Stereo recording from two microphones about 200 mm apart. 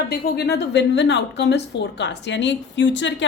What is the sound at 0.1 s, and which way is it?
A woman's voice, 55° left (ahead or behind).